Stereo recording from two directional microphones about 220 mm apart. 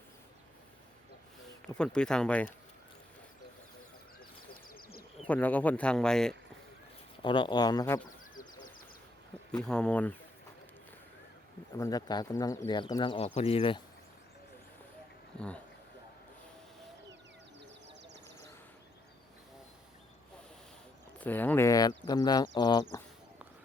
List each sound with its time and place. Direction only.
1.6 s speech: 5° left (ahead or behind)
4.7 s a sound: 45° left (ahead or behind)
5.3 s speech: 5° left (ahead or behind)
7.2 s speech: 20° left (ahead or behind)
8.4 s a sound: 40° left (ahead or behind)
9.6 s speech: 5° left (ahead or behind)
11.8 s speech: 15° left (ahead or behind)
15.4 s speech: 5° left (ahead or behind)
21.2 s speech: 10° left (ahead or behind)